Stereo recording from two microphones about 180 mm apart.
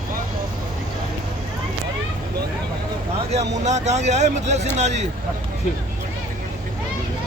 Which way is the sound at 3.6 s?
40° right (ahead or behind).